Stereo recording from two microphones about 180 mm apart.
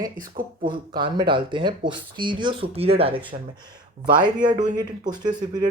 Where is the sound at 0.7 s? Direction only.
25° right (ahead or behind).